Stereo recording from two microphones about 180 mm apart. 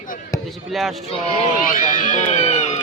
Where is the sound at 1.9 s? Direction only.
45° left (ahead or behind).